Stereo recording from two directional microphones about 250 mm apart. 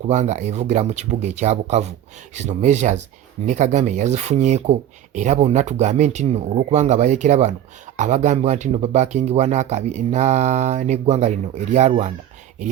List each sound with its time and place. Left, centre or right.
0.1 s speech: right